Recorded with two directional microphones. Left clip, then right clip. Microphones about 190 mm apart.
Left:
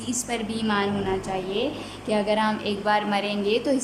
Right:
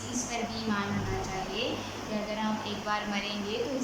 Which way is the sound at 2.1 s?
50° left (ahead or behind).